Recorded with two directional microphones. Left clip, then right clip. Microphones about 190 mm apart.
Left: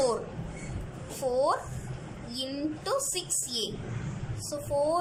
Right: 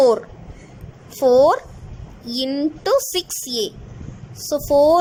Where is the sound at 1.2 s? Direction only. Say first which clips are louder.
Right 14 dB; 45° right (ahead or behind).